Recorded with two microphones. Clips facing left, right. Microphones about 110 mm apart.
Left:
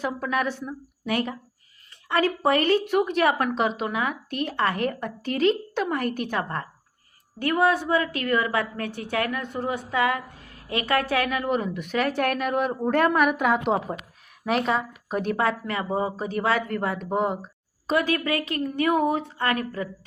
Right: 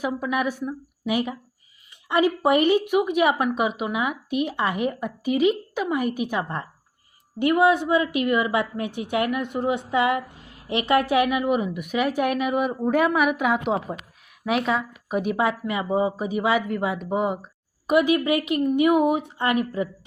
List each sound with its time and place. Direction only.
0.0 s a woman's voice: 10° right (ahead or behind)
17.8 s a woman's voice: 15° right (ahead or behind)